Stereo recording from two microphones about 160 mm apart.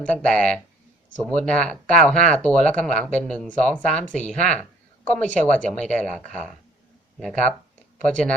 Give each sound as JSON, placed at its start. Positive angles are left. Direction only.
{"t": 0.0, "sound": "speech", "side_deg": 5}